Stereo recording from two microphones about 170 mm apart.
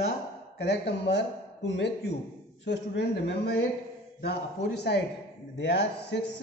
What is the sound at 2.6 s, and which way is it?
A woman's voice, 80° left.